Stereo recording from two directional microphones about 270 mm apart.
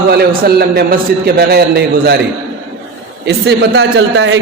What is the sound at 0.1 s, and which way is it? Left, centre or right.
A man's voice, right.